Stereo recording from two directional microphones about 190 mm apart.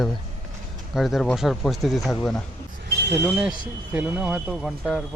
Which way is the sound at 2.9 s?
60° right (ahead or behind).